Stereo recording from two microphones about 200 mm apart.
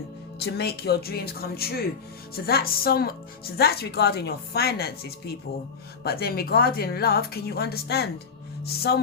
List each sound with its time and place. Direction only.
0.3 s speech: 55° left (ahead or behind)